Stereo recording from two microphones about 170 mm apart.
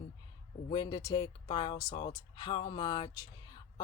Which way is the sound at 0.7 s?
25° left (ahead or behind).